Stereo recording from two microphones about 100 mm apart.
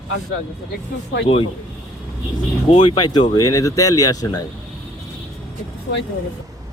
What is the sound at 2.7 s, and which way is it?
Speech, 55° left (ahead or behind).